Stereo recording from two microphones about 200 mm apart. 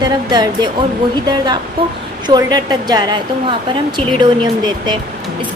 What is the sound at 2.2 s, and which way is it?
A woman's voice, 20° right (ahead or behind).